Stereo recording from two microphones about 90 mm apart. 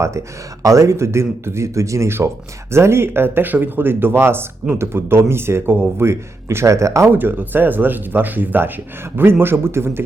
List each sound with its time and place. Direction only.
0.6 s speech: 35° right (ahead or behind)
7.1 s speech: 20° right (ahead or behind)